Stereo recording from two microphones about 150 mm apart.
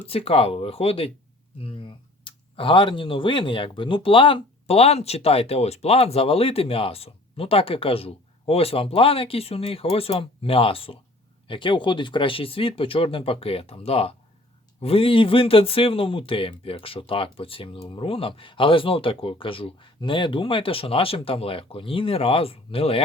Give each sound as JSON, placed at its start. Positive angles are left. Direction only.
{"t": 0.1, "sound": "speech", "side_deg": 40}